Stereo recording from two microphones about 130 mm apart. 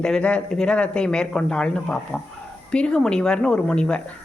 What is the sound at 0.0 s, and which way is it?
A woman's voice, 5° left (ahead or behind).